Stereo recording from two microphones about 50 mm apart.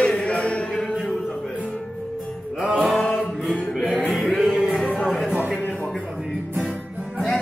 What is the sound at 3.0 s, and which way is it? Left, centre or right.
Music, centre.